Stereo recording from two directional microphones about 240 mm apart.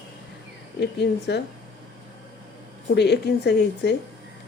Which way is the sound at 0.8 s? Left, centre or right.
Left.